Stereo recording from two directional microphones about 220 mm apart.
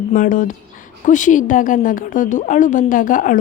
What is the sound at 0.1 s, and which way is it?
Speech, 35° left (ahead or behind).